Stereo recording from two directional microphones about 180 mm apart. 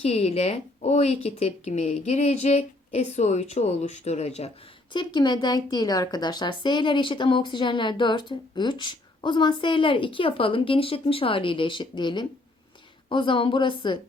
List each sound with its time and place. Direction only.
0.0 s speech: 35° left (ahead or behind)